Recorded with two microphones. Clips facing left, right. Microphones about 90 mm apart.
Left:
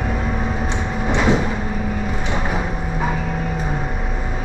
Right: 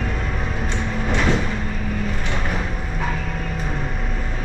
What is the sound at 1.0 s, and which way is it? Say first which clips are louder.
Sliding door: left 4 dB; 10° left (ahead or behind).